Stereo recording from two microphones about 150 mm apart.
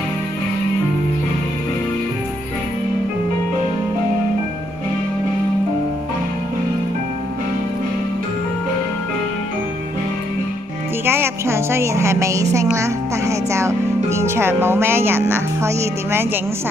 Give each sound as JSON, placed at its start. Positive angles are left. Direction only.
{"t": 11.1, "sound": "a woman's voice", "side_deg": -15}